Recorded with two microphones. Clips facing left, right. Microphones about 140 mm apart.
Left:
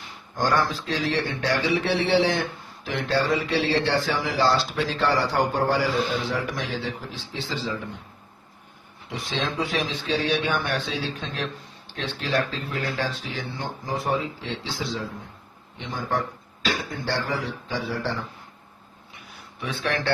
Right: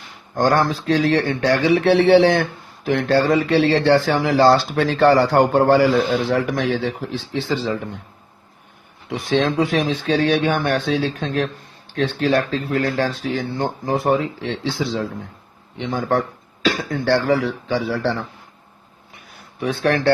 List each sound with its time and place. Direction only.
0.3 s speech: 50° right (ahead or behind)
9.0 s speech: 55° right (ahead or behind)
15.8 s speech: 75° right (ahead or behind)
19.5 s speech: 45° right (ahead or behind)